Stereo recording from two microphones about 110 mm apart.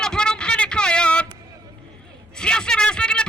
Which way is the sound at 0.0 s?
5° left (ahead or behind).